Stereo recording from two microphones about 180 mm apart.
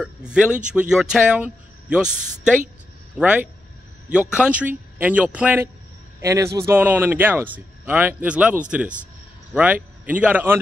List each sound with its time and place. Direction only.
0.0 s speech: 5° right (ahead or behind)